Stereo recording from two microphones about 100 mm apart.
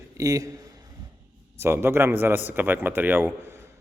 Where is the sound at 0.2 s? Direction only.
35° right (ahead or behind).